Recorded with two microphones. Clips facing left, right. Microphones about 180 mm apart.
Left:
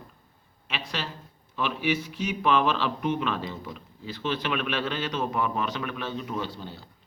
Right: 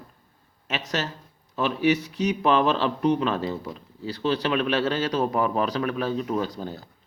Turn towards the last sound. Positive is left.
turn(degrees=-45)  # may be behind; listen again after turning